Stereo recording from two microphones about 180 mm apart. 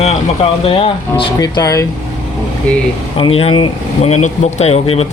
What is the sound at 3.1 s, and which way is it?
Speech, 30° left (ahead or behind).